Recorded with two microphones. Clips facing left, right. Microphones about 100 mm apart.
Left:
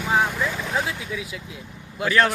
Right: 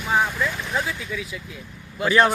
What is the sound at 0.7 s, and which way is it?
Speech, 10° left (ahead or behind).